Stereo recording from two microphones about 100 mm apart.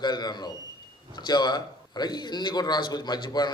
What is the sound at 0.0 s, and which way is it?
A man's voice, 45° left (ahead or behind).